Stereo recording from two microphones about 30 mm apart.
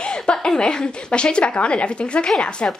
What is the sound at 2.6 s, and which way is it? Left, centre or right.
Speech, left.